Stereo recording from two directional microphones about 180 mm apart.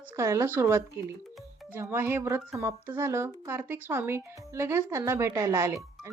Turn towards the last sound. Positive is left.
turn(degrees=-15)  # may be behind; listen again after turning